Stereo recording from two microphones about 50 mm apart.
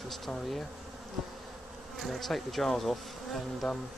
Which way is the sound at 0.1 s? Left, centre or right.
Centre.